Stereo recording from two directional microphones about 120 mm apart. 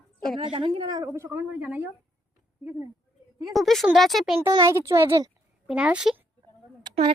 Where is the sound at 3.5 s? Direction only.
Centre (ahead or behind).